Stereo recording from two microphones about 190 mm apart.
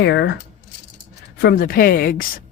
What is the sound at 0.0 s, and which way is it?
Speech, 65° left (ahead or behind).